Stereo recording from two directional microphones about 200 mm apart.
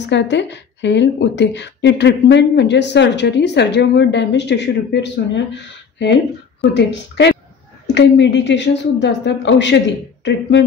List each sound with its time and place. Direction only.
0.0 s a woman's voice: 60° left (ahead or behind)